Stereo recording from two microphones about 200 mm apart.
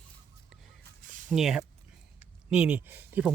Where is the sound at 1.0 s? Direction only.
40° right (ahead or behind).